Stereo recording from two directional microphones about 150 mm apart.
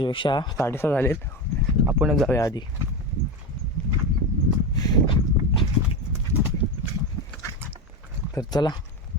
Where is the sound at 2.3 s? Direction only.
20° left (ahead or behind).